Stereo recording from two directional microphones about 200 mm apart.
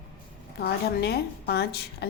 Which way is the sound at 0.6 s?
55° left (ahead or behind).